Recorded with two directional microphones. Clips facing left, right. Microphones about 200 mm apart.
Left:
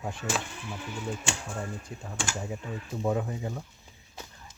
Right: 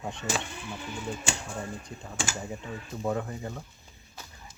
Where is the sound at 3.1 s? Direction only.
15° left (ahead or behind).